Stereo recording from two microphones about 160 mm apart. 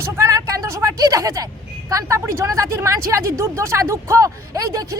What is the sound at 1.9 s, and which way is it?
A woman's voice, 20° right (ahead or behind).